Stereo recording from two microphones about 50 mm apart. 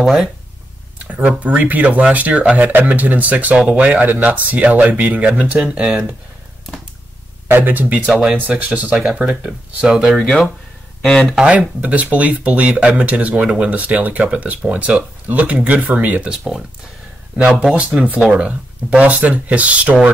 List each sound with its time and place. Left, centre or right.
0.0 s speech: centre
0.9 s speech: right
5.6 s speech: centre
7.4 s speech: right
8.1 s speech: centre
8.4 s speech: right
9.8 s speech: centre
10.1 s speech: centre
11.8 s speech: right
16.2 s speech: centre
18.3 s speech: right